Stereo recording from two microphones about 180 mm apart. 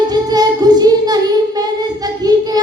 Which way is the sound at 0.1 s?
20° right (ahead or behind).